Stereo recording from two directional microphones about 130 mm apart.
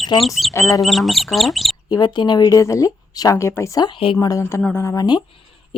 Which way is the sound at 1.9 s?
35° left (ahead or behind).